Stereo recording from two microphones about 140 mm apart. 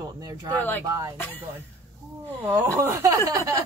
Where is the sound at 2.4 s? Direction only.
15° right (ahead or behind).